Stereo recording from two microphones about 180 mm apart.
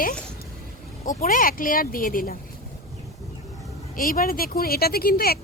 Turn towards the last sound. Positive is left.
turn(degrees=55)  # may be behind; listen again after turning